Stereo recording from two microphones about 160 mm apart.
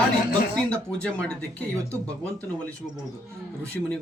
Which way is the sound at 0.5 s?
5° left (ahead or behind).